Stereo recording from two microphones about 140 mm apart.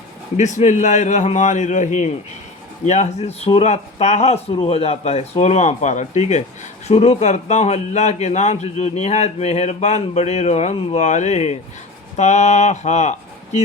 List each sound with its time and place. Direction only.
0.3 s a man's voice: 60° left (ahead or behind)